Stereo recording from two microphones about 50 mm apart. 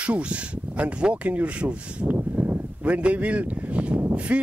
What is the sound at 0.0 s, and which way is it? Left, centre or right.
Speech, right.